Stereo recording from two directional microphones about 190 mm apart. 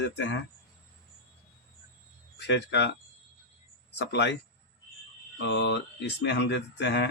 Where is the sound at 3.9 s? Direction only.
65° left (ahead or behind).